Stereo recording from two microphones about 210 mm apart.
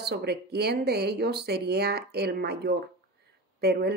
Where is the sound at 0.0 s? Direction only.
50° right (ahead or behind).